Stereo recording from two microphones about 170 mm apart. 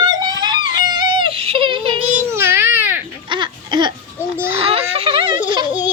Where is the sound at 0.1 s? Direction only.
25° right (ahead or behind).